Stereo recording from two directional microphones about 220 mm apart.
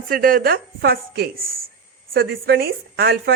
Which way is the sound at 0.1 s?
40° right (ahead or behind).